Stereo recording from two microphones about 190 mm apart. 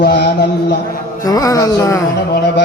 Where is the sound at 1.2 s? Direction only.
20° left (ahead or behind).